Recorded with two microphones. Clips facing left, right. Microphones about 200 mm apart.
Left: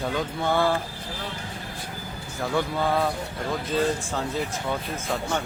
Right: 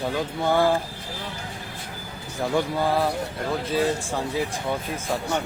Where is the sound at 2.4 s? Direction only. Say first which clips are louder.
Right 2 dB; 15° right (ahead or behind).